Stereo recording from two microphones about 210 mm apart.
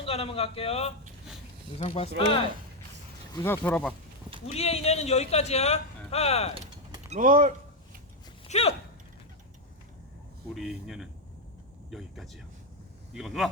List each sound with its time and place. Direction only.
0.0 s a man's voice: 30° left (ahead or behind)
3.3 s speech: 10° left (ahead or behind)
4.5 s speech: 30° left (ahead or behind)
6.5 s a sound: 25° right (ahead or behind)
7.2 s speech: 40° right (ahead or behind)
8.4 s sigh: 30° left (ahead or behind)
10.5 s speech: centre (ahead or behind)